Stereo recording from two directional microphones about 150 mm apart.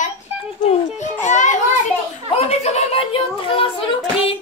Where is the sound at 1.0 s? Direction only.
50° left (ahead or behind).